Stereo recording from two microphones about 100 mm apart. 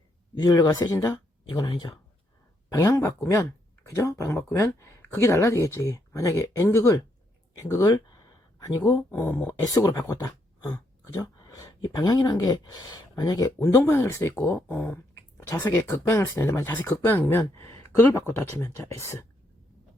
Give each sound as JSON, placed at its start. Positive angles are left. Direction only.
{"t": 0.3, "sound": "speech", "side_deg": 40}
{"t": 0.9, "sound": "speech", "side_deg": 30}
{"t": 1.5, "sound": "speech", "side_deg": 50}
{"t": 2.6, "sound": "speech", "side_deg": 35}
{"t": 8.9, "sound": "speech", "side_deg": 25}
{"t": 9.6, "sound": "speech", "side_deg": 35}